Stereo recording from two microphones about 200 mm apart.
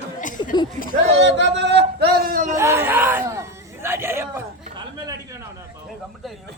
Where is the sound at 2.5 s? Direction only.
15° right (ahead or behind).